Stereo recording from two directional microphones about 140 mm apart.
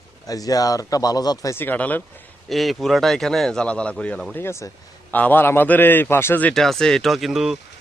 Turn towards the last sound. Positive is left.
turn(degrees=0)  # may be behind; listen again after turning